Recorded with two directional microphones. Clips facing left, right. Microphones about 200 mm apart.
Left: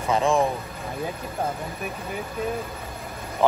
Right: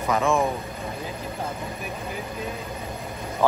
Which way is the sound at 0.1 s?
30° left (ahead or behind).